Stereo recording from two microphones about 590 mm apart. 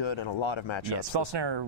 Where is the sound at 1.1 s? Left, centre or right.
Right.